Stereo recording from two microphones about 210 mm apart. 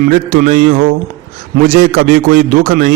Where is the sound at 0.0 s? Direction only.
45° right (ahead or behind).